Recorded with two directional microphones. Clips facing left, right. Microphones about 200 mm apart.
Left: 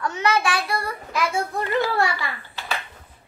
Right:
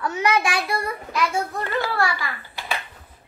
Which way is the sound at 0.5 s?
25° right (ahead or behind).